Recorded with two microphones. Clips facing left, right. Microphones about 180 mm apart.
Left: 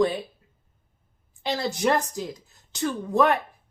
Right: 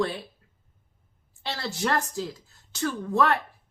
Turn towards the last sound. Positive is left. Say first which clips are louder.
# left 3 dB
turn(degrees=15)  # may be behind; listen again after turning